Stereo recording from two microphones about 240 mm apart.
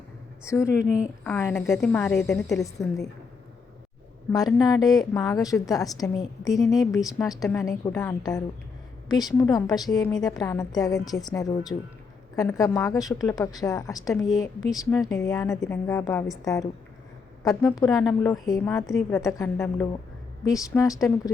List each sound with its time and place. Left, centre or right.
0.4 s a woman's voice: centre
2.6 s a woman's voice: centre
4.3 s a woman's voice: centre